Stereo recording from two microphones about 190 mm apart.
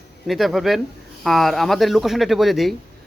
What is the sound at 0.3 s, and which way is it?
Speech, centre (ahead or behind).